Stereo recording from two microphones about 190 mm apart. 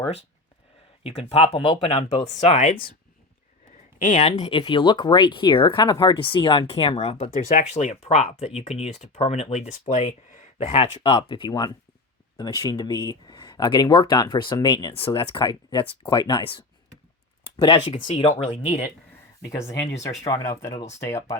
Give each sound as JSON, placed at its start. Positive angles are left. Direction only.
{"t": 1.3, "sound": "speech", "side_deg": 30}
{"t": 3.9, "sound": "a woman's voice", "side_deg": 40}
{"t": 17.6, "sound": "speech", "side_deg": 25}
{"t": 19.5, "sound": "speech", "side_deg": 15}